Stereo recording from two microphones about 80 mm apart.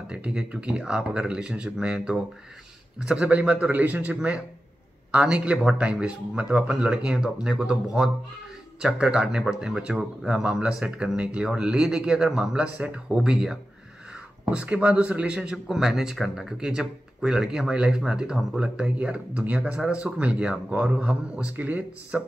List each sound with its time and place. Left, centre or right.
0.1 s speech: centre